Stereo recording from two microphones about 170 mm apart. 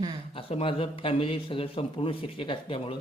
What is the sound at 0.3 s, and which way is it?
A man's voice, 30° left (ahead or behind).